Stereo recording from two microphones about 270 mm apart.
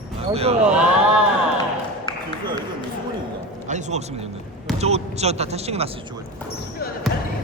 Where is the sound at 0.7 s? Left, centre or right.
Centre.